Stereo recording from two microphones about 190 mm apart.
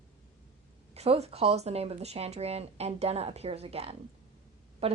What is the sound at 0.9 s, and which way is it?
A woman's voice, 35° right (ahead or behind).